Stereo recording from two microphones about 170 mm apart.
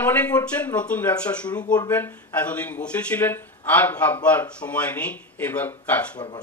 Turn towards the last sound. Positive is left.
turn(degrees=10)  # may be behind; listen again after turning